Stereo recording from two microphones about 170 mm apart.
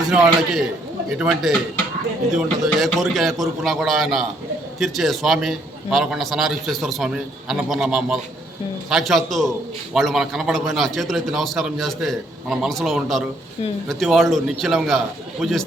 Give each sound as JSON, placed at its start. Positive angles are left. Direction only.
{"t": 0.0, "sound": "a man's voice", "side_deg": -5}